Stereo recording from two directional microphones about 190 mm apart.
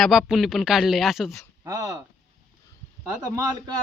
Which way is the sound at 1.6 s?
15° right (ahead or behind).